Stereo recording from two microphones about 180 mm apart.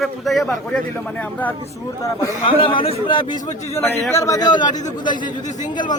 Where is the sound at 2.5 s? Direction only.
30° left (ahead or behind).